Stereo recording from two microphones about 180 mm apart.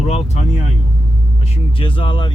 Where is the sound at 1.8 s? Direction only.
30° left (ahead or behind).